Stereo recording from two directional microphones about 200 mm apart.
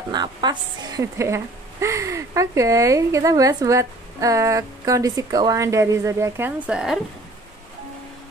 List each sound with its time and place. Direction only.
0.1 s a woman's voice: 20° right (ahead or behind); by 7.0 s 5° right (ahead or behind)